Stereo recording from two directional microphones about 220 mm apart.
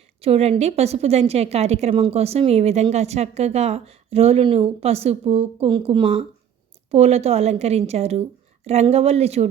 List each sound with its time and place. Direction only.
0.2 s a woman's voice: 30° right (ahead or behind)